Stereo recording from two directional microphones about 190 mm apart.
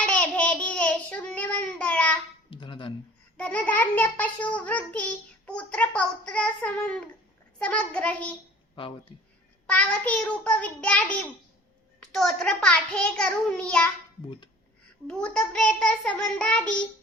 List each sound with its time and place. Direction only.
0.0 s child singing: 5° left (ahead or behind)
2.5 s a sound: 25° left (ahead or behind)
3.3 s a child's voice: 5° left (ahead or behind)
9.6 s a child's voice: 5° left (ahead or behind)
15.0 s a child's voice: 5° left (ahead or behind)